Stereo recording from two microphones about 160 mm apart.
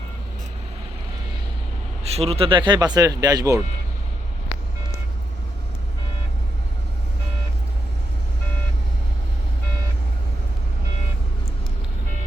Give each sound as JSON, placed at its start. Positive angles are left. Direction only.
{"t": 2.0, "sound": "speech", "side_deg": -40}